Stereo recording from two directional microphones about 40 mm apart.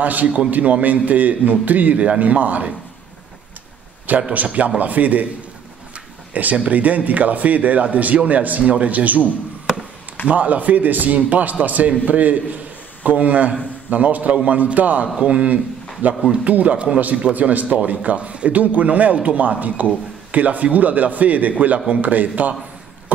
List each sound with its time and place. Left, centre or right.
0.0 s a man's voice: right
4.3 s a man's voice: right
6.5 s a man's voice: right
10.3 s a man's voice: right
16.0 s a man's voice: right